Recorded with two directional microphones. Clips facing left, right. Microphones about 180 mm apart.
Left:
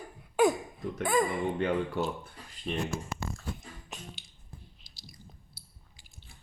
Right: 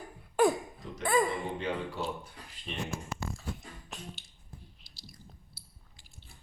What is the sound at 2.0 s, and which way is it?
Speech, 60° left (ahead or behind).